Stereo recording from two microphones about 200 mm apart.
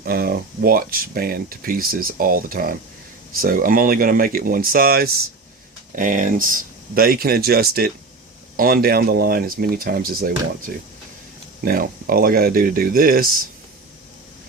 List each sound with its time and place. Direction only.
0.0 s speech: 50° right (ahead or behind)